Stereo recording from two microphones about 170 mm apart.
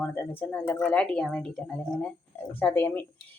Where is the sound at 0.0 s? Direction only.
10° left (ahead or behind).